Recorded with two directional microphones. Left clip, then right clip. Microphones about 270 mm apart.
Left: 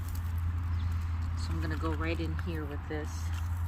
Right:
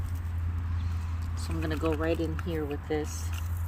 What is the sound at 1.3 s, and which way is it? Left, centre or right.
Speech, right.